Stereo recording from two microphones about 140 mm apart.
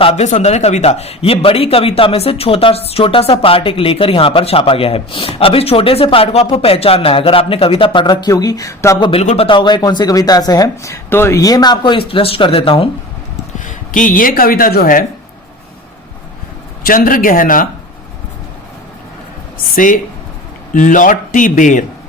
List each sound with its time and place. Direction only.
0.0 s speech: 40° left (ahead or behind)
0.3 s a man's voice: 55° left (ahead or behind); by 9.0 s 25° left (ahead or behind)
9.2 s speech: 45° left (ahead or behind)
13.6 s speech: 70° left (ahead or behind); by 15.0 s 90° left
16.8 s speech: 90° left
19.7 s speech: 70° left (ahead or behind)